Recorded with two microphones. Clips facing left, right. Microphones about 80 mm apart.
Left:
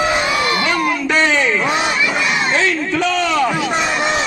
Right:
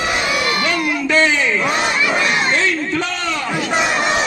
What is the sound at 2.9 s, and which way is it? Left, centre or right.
Speech, left.